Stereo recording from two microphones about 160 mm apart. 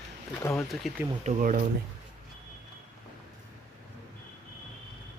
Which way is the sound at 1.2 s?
55° right (ahead or behind).